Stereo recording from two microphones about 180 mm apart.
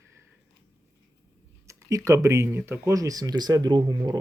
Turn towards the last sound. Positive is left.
turn(degrees=-20)  # may be behind; listen again after turning